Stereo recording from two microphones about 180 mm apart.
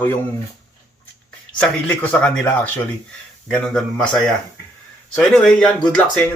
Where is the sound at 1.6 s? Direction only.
10° left (ahead or behind).